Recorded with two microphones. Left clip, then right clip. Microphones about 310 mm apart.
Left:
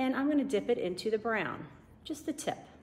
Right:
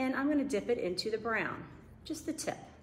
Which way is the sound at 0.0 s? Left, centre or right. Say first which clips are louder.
Left 1 dB; left.